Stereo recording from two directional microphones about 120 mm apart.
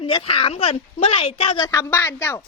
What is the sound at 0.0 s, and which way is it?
A woman's voice, 50° left (ahead or behind).